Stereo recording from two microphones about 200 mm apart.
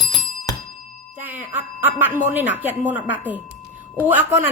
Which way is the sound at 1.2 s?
10° right (ahead or behind).